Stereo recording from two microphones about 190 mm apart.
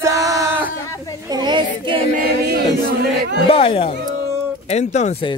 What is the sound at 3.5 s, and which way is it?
Speech, 30° left (ahead or behind).